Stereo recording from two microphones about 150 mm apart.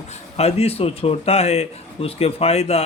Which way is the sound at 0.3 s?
45° left (ahead or behind).